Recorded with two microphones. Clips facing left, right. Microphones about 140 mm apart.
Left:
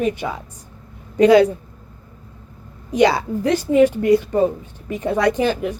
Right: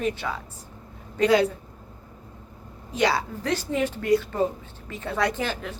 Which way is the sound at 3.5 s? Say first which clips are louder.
Left 11 dB; 15° left (ahead or behind).